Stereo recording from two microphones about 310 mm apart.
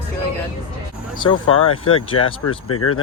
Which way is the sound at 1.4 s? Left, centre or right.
Left.